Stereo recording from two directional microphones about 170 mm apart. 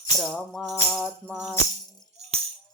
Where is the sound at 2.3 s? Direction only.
35° right (ahead or behind).